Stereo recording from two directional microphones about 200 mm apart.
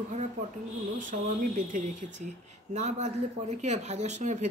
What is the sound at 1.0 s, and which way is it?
Speech, 40° right (ahead or behind).